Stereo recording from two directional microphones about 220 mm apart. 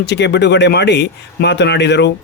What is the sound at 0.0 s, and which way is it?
A man's voice, 50° left (ahead or behind).